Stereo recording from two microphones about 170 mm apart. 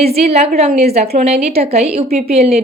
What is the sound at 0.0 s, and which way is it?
A woman's voice, 35° right (ahead or behind).